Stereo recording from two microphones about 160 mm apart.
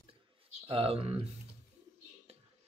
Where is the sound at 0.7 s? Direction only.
35° right (ahead or behind).